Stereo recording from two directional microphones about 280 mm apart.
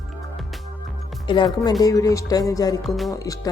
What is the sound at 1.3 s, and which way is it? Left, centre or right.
Speech, centre.